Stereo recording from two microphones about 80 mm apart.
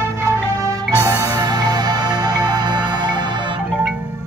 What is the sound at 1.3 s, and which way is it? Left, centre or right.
Music, right.